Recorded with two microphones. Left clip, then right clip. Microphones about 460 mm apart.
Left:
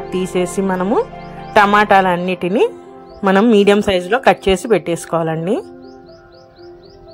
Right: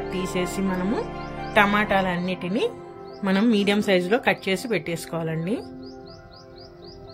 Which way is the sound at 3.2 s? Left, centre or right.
Left.